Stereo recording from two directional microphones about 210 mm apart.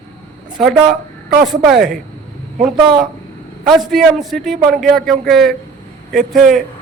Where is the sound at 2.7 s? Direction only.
20° right (ahead or behind).